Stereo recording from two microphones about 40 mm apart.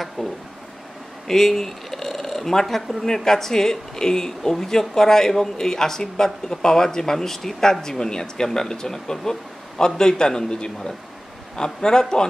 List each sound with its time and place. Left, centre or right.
0.2 s speech: centre